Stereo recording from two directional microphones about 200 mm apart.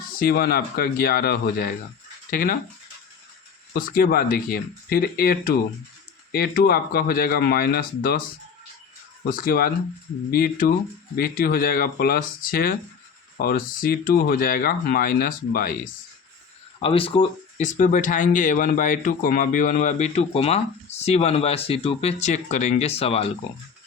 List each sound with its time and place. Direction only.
0.2 s speech: 50° left (ahead or behind)
3.7 s speech: 45° left (ahead or behind)
9.3 s speech: 45° left (ahead or behind)
16.8 s speech: 25° left (ahead or behind)
17.6 s speech: 40° left (ahead or behind)